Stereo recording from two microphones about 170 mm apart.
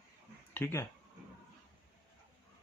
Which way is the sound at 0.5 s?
15° left (ahead or behind).